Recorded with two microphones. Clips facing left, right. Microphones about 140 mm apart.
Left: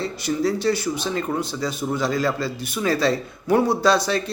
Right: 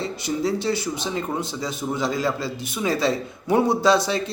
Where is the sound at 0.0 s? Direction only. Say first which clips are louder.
Left 2 dB; 20° right (ahead or behind).